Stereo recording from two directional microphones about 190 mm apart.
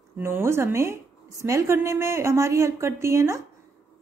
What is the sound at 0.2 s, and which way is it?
A woman's voice, 15° right (ahead or behind).